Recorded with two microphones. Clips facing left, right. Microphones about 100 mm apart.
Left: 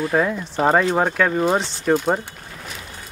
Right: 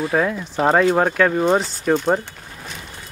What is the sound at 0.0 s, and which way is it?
Speech, centre (ahead or behind).